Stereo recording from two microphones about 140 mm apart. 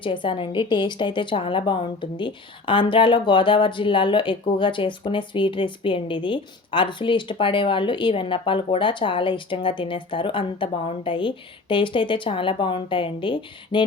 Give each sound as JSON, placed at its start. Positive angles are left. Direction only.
{"t": 0.0, "sound": "a woman's voice", "side_deg": 35}